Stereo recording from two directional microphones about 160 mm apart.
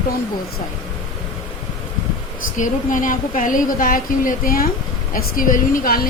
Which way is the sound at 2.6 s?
55° left (ahead or behind).